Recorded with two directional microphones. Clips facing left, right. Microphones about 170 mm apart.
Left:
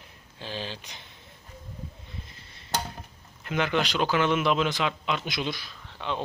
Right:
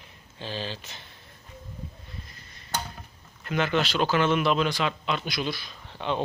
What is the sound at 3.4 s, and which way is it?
Speech, 15° left (ahead or behind).